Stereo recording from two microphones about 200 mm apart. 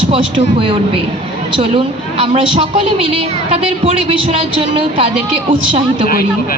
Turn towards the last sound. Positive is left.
turn(degrees=-25)  # may be behind; listen again after turning